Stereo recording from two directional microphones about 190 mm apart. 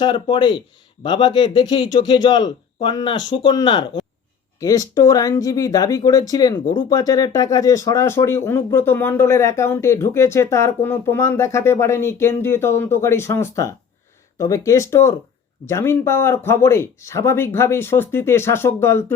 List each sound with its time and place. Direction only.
0.0 s speech: 25° left (ahead or behind)